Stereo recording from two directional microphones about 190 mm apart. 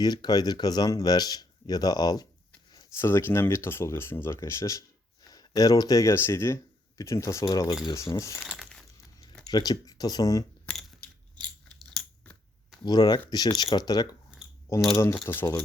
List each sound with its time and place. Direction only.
0.0 s speech: 20° left (ahead or behind)
8.4 s a sound: centre (ahead or behind)
9.5 s speech: 20° left (ahead or behind)
10.7 s a sound: centre (ahead or behind)
11.9 s scissors: 5° left (ahead or behind)
12.8 s speech: 20° left (ahead or behind)